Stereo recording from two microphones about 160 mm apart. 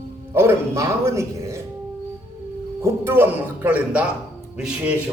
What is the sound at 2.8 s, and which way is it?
Speech, 15° right (ahead or behind).